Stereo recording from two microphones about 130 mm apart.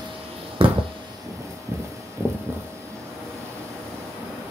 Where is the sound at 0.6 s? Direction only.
45° right (ahead or behind).